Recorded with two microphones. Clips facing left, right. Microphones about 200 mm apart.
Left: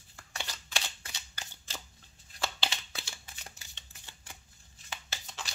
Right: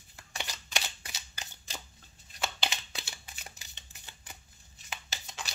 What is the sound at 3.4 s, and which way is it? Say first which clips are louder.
Typewriter: right 1 dB; 15° right (ahead or behind).